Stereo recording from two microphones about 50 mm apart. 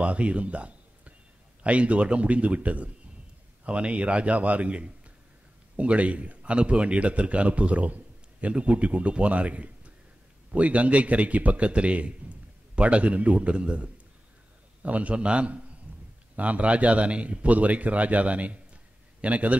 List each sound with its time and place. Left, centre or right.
0.0 s a man's voice: right